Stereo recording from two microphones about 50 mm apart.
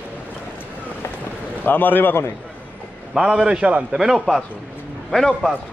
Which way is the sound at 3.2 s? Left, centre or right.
Right.